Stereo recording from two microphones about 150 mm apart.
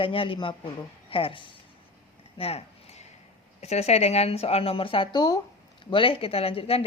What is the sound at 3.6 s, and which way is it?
Speech, 45° left (ahead or behind).